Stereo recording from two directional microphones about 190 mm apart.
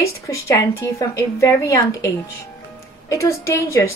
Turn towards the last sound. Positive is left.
turn(degrees=15)  # may be behind; listen again after turning